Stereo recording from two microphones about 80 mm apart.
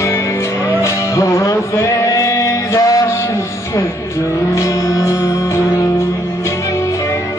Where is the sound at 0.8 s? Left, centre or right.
Left.